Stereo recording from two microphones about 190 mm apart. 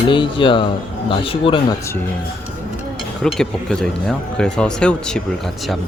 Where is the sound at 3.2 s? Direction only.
5° left (ahead or behind).